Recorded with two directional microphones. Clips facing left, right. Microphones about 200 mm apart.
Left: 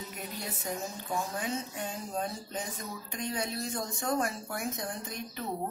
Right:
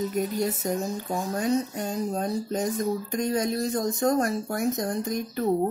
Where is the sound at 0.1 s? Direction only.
40° right (ahead or behind).